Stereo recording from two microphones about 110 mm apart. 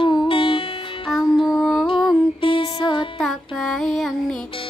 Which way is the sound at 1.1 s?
Centre (ahead or behind).